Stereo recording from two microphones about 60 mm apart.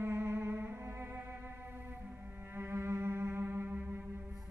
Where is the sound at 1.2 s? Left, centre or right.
Right.